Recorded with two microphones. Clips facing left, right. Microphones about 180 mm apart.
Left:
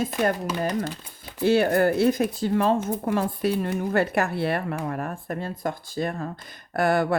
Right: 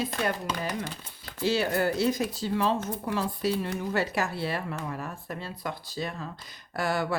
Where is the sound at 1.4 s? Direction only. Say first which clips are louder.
Left 7 dB; 55° left (ahead or behind).